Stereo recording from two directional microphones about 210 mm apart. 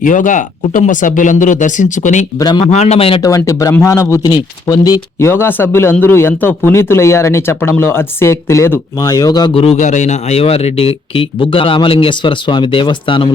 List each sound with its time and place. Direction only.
0.0 s speech: 40° left (ahead or behind)
2.4 s a man's voice: 20° left (ahead or behind)
2.6 s a man's voice: 30° left (ahead or behind)